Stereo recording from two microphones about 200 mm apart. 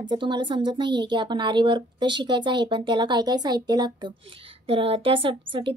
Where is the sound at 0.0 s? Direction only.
25° right (ahead or behind).